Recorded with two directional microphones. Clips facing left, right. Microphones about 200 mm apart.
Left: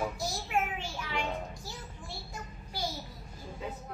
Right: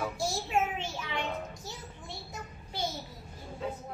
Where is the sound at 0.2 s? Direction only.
25° right (ahead or behind).